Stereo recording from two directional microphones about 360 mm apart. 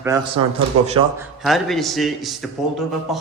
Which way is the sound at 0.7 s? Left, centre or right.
Right.